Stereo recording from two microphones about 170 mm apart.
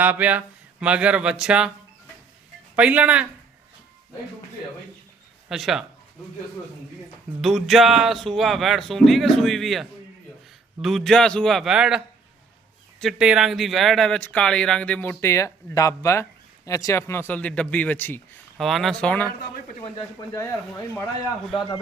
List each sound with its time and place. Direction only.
0.0 s speech: 10° right (ahead or behind)
2.7 s speech: 10° right (ahead or behind)
5.5 s speech: centre (ahead or behind)
7.4 s speech: centre (ahead or behind)
18.5 s speech: centre (ahead or behind)
20.1 s speech: 15° left (ahead or behind)